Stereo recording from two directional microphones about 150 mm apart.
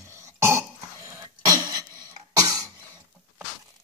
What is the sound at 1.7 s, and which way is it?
Throat clearing, 25° right (ahead or behind).